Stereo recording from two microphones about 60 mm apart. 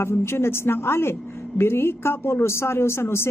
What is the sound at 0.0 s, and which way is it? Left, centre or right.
A woman's voice, left.